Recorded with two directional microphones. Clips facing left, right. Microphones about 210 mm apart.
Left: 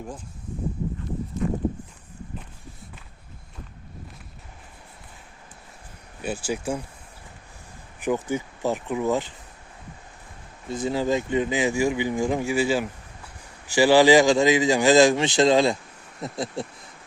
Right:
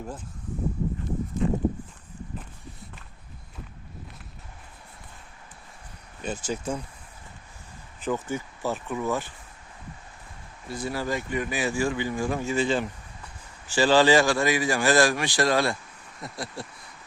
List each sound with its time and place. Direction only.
6.2 s speech: 10° left (ahead or behind)
7.9 s speech: 15° left (ahead or behind)
10.7 s speech: 20° left (ahead or behind)